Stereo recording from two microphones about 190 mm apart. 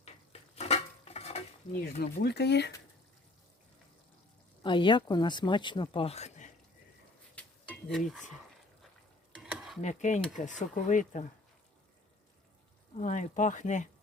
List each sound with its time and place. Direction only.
0.5 s dishes: 35° left (ahead or behind)
2.0 s speech: 60° left (ahead or behind)
4.6 s speech: 25° left (ahead or behind)
7.4 s stir: 5° left (ahead or behind)
9.4 s stir: 5° right (ahead or behind)
9.8 s speech: 40° left (ahead or behind)
13.0 s speech: 40° left (ahead or behind)